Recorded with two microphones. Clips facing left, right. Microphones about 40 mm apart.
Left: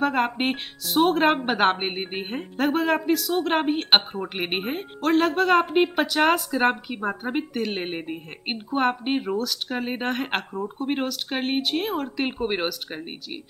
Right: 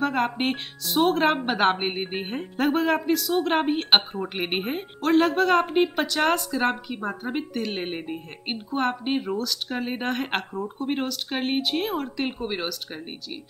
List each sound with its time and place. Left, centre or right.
0.0 s speech: centre
12.4 s speech: left